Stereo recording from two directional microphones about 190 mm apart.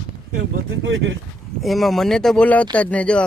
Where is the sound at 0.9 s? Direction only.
80° right.